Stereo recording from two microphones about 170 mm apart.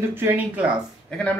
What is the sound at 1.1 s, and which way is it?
Speech, 5° left (ahead or behind).